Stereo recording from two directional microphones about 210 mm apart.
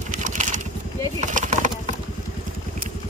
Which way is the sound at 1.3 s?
35° right (ahead or behind).